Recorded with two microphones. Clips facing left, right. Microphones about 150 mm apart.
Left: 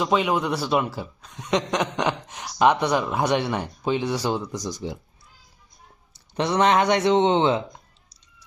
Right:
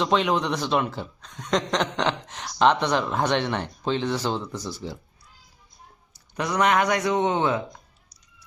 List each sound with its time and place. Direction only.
0.0 s speech: 5° left (ahead or behind)
6.1 s speech: 25° left (ahead or behind)